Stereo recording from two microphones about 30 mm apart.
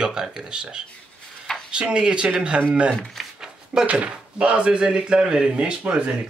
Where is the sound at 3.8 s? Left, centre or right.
Right.